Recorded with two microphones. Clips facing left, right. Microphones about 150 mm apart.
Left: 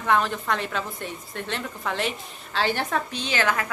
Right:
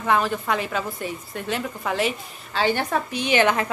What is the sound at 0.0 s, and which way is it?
A woman's voice, 5° right (ahead or behind).